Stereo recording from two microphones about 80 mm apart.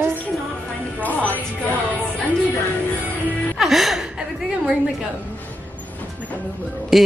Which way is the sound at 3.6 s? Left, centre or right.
Centre.